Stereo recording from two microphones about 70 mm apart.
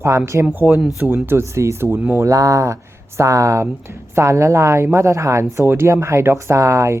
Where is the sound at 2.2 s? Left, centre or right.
Right.